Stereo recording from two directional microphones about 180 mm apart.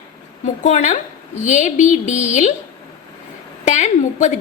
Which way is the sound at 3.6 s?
40° left (ahead or behind).